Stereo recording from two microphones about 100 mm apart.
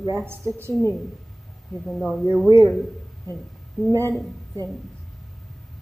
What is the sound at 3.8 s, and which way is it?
Speech, centre (ahead or behind).